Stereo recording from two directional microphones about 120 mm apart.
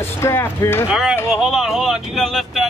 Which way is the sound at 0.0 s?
20° left (ahead or behind).